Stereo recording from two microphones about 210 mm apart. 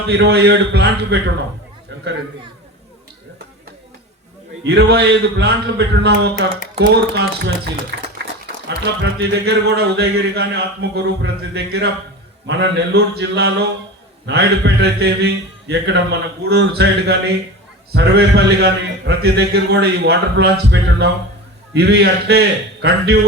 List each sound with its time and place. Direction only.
0.1 s a man's voice: 50° right (ahead or behind)
4.6 s a man's voice: 50° right (ahead or behind)